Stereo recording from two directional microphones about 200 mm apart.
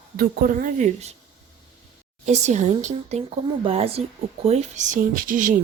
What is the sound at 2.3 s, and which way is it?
A woman's voice, 35° right (ahead or behind).